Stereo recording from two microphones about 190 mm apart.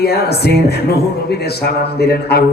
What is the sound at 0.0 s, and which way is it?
A man's voice, 55° left (ahead or behind).